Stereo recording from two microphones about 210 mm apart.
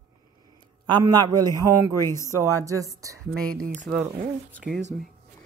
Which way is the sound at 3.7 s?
Centre (ahead or behind).